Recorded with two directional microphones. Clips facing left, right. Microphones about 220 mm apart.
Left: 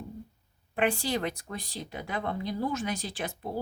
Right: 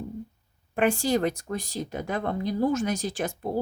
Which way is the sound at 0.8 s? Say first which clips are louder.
Right 5 dB; 45° right (ahead or behind).